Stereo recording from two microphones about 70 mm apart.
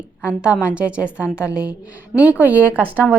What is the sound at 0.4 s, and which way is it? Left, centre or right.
A woman's voice, centre.